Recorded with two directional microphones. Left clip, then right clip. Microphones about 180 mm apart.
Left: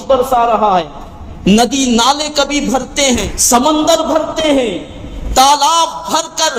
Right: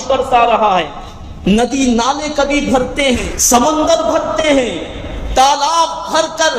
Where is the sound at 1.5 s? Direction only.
30° left (ahead or behind).